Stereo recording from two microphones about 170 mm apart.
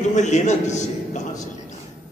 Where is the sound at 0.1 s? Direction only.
45° left (ahead or behind).